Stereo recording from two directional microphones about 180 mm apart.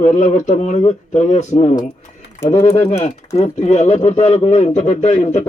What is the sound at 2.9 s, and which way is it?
Speech, 40° left (ahead or behind).